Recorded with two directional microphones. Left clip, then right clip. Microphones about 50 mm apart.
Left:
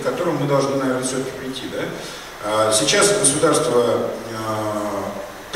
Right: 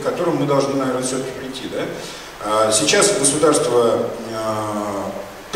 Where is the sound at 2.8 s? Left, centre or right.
Right.